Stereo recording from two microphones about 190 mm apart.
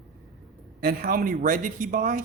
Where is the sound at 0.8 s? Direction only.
50° right (ahead or behind).